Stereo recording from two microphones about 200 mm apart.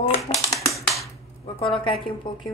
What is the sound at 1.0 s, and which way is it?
Cap gun, 25° left (ahead or behind).